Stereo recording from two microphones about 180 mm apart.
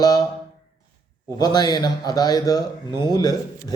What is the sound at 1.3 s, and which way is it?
Speech, 20° left (ahead or behind).